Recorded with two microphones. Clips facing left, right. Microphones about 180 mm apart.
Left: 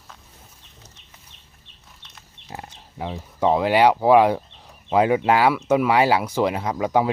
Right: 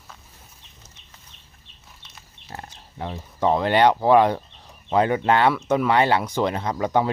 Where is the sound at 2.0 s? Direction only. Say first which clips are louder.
Even; 5° right (ahead or behind).